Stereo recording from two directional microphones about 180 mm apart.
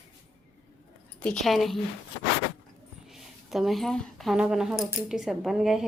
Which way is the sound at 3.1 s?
Centre (ahead or behind).